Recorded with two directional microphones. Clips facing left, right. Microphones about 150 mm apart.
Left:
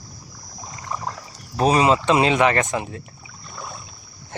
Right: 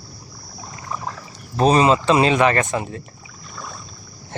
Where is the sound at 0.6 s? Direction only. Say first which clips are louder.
Even; 15° left (ahead or behind).